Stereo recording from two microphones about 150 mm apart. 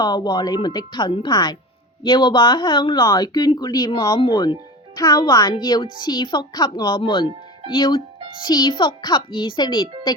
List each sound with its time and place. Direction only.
0.0 s a child's voice: 30° left (ahead or behind)